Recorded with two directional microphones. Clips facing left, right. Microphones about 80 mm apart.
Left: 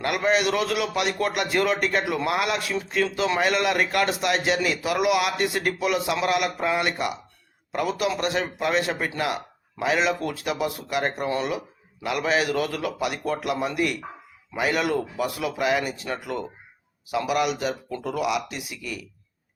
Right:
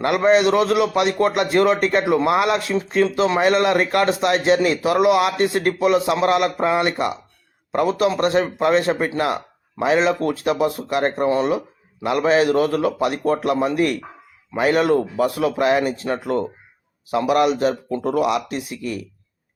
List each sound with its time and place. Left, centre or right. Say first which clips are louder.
0.0 s a man's voice: right 7 dB; right